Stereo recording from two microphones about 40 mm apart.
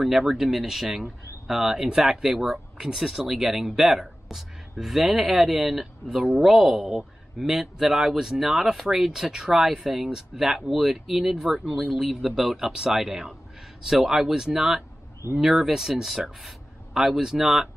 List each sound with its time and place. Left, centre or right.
0.0 s speech: centre